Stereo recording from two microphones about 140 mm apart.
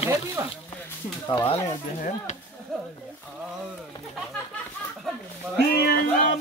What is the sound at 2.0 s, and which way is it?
Speech, 70° left (ahead or behind).